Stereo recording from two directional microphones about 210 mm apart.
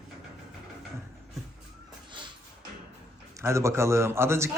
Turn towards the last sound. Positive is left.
turn(degrees=-15)  # may be behind; listen again after turning